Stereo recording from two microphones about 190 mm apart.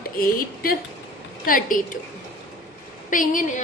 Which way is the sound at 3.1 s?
45° left (ahead or behind).